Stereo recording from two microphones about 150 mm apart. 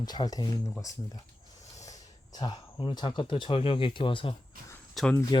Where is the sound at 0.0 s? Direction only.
25° left (ahead or behind).